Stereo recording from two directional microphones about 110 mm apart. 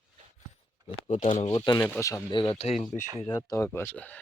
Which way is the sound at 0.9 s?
65° left (ahead or behind).